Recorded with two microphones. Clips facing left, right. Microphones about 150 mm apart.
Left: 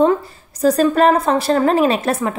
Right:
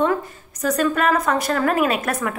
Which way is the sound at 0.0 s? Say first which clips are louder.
Left 5 dB; 30° left (ahead or behind).